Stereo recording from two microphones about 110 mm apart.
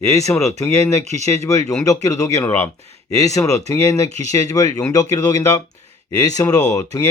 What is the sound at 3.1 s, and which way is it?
Speech, 30° left (ahead or behind).